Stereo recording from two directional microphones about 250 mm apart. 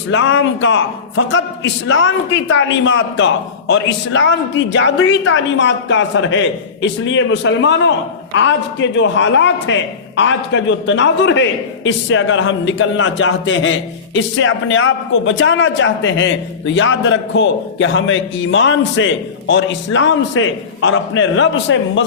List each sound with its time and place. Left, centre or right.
0.1 s a man's voice: left